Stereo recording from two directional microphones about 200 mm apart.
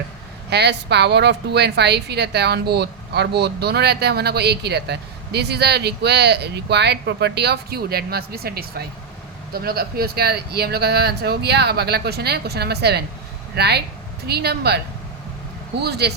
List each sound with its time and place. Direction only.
0.5 s a woman's voice: 55° right (ahead or behind)
15.8 s a woman's voice: 55° right (ahead or behind)